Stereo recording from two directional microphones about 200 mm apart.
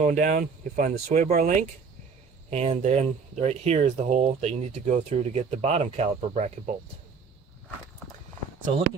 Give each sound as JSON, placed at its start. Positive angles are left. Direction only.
{"t": 0.0, "sound": "speech", "side_deg": -40}